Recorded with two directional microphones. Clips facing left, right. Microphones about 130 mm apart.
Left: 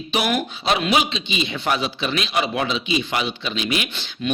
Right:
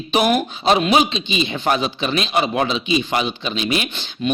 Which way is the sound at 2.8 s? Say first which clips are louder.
Right 3 dB; 25° right (ahead or behind).